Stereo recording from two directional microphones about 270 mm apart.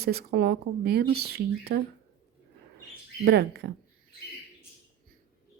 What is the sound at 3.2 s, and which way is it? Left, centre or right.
Speech, right.